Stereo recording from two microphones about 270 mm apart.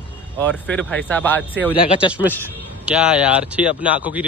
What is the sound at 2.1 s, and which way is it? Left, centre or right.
A man's voice, centre.